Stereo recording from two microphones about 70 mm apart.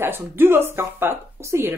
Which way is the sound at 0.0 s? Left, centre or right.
Right.